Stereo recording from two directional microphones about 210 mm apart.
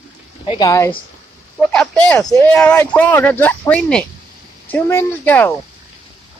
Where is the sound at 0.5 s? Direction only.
15° left (ahead or behind).